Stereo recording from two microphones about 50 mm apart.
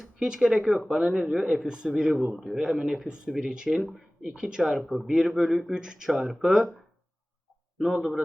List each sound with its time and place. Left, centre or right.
0.0 s speech: centre
2.3 s speech: centre
4.9 s speech: centre
5.1 s speech: centre